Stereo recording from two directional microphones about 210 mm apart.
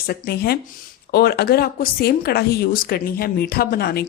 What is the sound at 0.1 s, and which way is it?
Speech, 50° left (ahead or behind).